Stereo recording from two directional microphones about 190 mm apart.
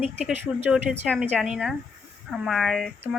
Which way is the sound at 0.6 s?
5° right (ahead or behind).